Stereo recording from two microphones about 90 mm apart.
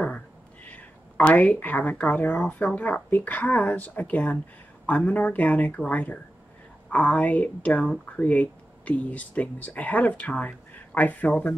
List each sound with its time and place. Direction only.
0.7 s speech: 15° left (ahead or behind)